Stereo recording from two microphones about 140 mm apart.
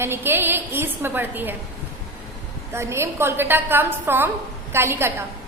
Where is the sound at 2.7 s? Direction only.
20° right (ahead or behind).